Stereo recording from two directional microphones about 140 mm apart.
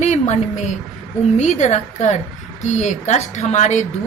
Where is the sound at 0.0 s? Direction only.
60° left (ahead or behind).